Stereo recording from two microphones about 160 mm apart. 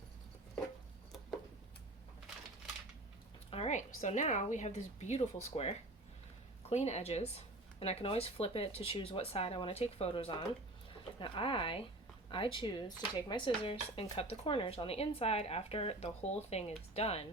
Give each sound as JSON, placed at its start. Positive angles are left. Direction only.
{"t": 3.5, "sound": "speech", "side_deg": 45}